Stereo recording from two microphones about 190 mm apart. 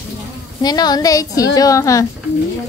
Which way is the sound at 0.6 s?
20° left (ahead or behind).